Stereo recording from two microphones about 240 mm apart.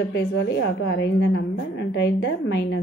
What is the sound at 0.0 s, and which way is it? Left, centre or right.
A woman's voice, left.